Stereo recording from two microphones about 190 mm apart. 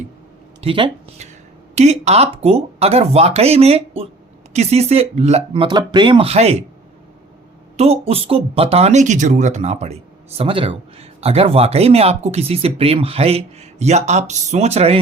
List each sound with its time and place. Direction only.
0.6 s speech: 30° right (ahead or behind)
5.6 s speech: 25° right (ahead or behind)
7.8 s speech: 30° right (ahead or behind)